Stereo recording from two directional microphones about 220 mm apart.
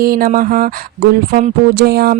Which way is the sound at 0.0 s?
40° right (ahead or behind).